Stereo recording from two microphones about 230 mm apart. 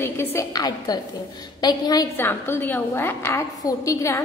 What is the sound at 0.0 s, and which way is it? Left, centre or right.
A woman's voice, centre.